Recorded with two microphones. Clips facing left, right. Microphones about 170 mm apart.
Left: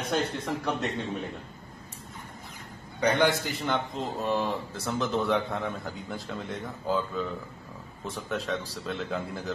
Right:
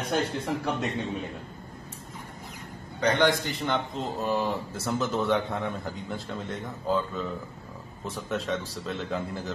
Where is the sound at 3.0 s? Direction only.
10° left (ahead or behind).